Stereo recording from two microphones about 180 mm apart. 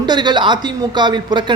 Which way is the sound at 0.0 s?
25° right (ahead or behind).